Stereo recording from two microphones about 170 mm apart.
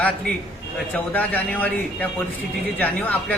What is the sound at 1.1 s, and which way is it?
A man's voice, 10° left (ahead or behind).